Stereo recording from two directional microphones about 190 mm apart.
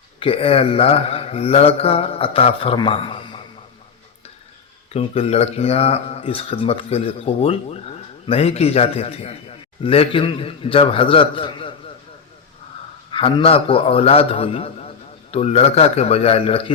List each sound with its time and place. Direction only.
0.2 s speech: 30° left (ahead or behind)
4.9 s a man's voice: 30° left (ahead or behind)
13.1 s speech: 30° left (ahead or behind)